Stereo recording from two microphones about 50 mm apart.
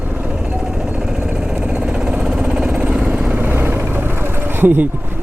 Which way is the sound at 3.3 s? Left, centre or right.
Right.